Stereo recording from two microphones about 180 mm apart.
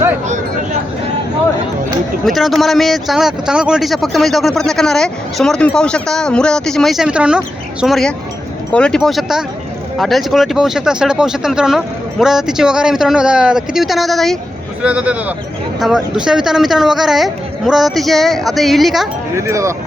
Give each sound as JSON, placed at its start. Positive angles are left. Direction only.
{"t": 2.2, "sound": "speech", "side_deg": 0}
{"t": 19.4, "sound": "speech", "side_deg": -15}